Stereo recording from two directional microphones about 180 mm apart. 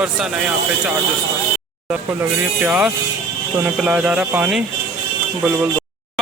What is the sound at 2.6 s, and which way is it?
Speech, 10° right (ahead or behind).